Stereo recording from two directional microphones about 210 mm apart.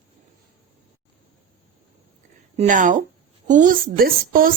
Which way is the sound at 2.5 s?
35° right (ahead or behind).